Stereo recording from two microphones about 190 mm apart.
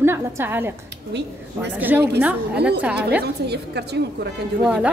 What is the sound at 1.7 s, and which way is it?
Speech, 10° right (ahead or behind).